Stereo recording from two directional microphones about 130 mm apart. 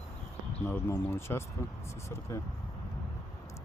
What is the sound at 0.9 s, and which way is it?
Speech, 20° left (ahead or behind).